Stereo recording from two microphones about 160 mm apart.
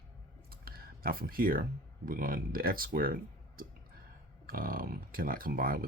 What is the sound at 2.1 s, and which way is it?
Speech, 65° right (ahead or behind).